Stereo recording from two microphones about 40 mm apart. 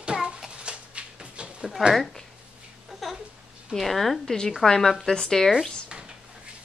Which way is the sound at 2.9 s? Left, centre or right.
Centre.